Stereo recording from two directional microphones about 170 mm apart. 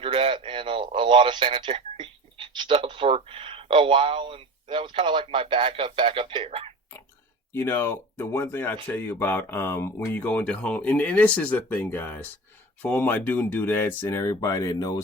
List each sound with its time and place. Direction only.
0.0 s speech: 30° right (ahead or behind)
7.5 s speech: 15° left (ahead or behind)